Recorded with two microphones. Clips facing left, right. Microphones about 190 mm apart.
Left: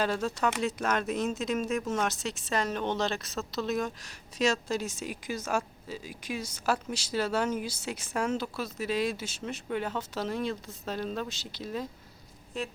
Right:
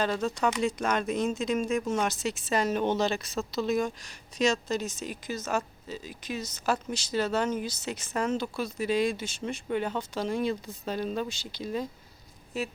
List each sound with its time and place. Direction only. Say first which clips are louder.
0.0 s speech: right 1 dB; 5° left (ahead or behind)